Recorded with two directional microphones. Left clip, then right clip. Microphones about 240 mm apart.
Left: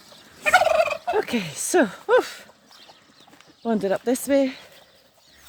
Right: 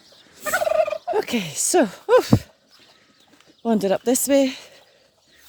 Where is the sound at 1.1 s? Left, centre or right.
Centre.